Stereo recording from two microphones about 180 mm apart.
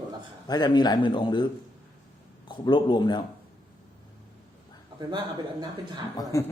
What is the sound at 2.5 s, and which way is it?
Speech, 25° left (ahead or behind).